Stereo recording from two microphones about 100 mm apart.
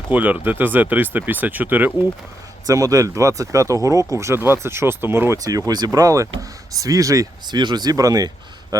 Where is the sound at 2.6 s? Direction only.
35° right (ahead or behind).